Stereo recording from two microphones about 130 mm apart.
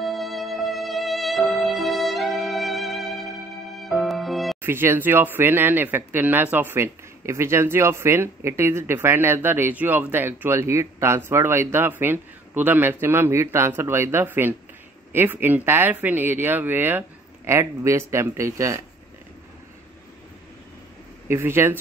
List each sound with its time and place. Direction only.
0.0 s music: centre (ahead or behind)
4.6 s speech: 20° right (ahead or behind)
21.3 s speech: 15° right (ahead or behind)